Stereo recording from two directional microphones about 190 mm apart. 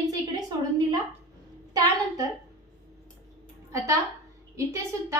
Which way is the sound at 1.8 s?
20° right (ahead or behind).